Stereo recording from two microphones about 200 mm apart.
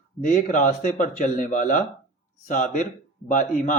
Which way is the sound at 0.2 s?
40° left (ahead or behind).